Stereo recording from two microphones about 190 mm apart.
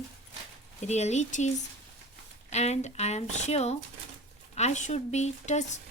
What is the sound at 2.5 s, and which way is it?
Speech, 35° left (ahead or behind).